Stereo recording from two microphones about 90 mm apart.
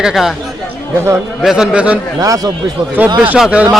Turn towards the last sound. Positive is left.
turn(degrees=-5)  # may be behind; listen again after turning